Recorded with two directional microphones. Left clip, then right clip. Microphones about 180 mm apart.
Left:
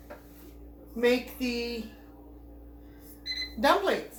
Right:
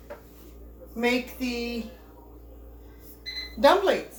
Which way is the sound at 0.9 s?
10° right (ahead or behind).